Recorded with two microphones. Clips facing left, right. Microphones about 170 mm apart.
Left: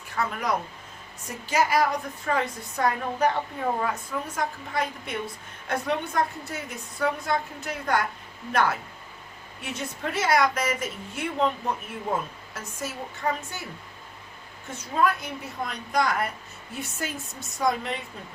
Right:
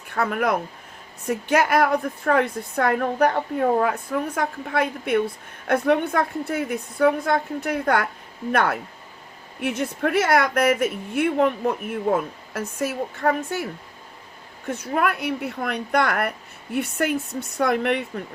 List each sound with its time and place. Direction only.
0.2 s a woman's voice: 60° right (ahead or behind)
14.7 s a woman's voice: 60° right (ahead or behind)